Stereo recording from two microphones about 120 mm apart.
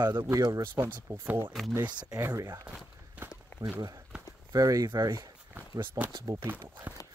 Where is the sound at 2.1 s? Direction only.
25° right (ahead or behind).